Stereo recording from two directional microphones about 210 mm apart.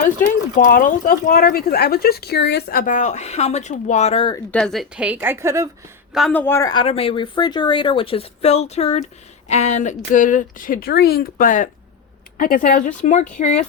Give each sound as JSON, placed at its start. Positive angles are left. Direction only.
{"t": 0.2, "sound": "speech", "side_deg": 40}
{"t": 4.5, "sound": "a woman's voice", "side_deg": 0}
{"t": 6.1, "sound": "speech", "side_deg": 5}